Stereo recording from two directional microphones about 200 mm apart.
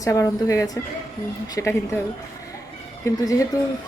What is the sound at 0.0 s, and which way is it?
A woman's voice, 15° left (ahead or behind).